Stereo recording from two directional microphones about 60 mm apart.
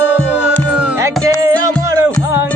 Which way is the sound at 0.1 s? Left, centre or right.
Centre.